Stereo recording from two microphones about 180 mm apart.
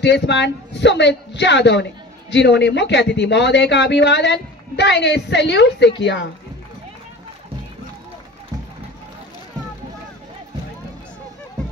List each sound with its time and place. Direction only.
0.0 s speech: 75° left (ahead or behind)